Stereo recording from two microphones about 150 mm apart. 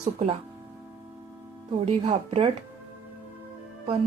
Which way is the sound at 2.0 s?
40° right (ahead or behind).